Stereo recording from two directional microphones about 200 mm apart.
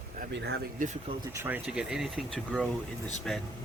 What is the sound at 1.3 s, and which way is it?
Speech, 10° right (ahead or behind).